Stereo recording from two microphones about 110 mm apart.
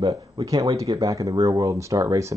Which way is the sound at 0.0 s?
40° right (ahead or behind).